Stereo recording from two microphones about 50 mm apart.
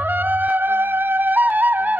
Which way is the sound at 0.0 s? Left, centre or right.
Right.